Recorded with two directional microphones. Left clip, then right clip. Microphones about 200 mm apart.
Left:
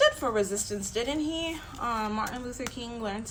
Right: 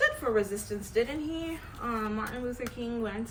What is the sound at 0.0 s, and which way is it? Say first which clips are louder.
A woman's voice: left 3 dB; 25° left (ahead or behind).